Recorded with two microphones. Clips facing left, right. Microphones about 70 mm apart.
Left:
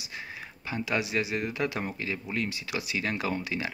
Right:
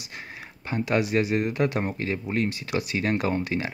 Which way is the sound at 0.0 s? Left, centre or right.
Right.